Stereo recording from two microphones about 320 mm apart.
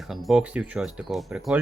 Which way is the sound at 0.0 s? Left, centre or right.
Centre.